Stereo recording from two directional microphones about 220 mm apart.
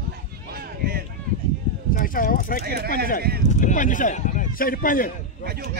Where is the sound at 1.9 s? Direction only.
40° left (ahead or behind).